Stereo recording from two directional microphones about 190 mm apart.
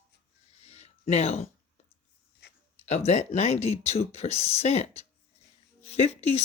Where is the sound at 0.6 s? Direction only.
35° left (ahead or behind).